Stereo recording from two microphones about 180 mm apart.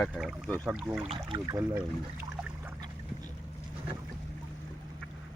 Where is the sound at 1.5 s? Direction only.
15° right (ahead or behind).